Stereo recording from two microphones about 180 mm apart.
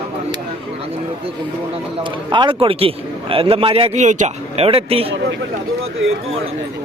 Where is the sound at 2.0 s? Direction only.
25° right (ahead or behind).